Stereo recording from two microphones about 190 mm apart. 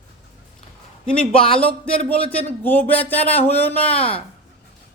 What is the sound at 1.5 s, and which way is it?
Speech, 5° left (ahead or behind).